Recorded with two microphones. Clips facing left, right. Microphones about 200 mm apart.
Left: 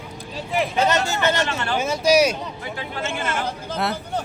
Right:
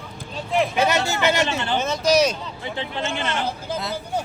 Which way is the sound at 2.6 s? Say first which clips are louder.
Right 2 dB; 25° right (ahead or behind).